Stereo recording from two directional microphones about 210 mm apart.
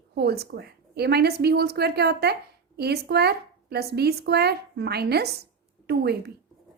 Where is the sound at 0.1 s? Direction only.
50° right (ahead or behind).